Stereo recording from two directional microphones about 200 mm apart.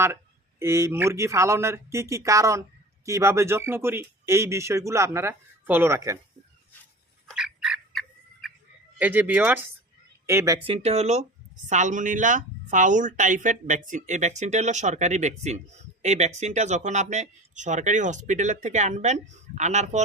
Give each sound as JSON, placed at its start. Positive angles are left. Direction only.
{"t": 0.6, "sound": "speech", "side_deg": -15}
{"t": 7.3, "sound": "fowl", "side_deg": -5}
{"t": 9.0, "sound": "speech", "side_deg": -10}
{"t": 10.7, "sound": "speech", "side_deg": -30}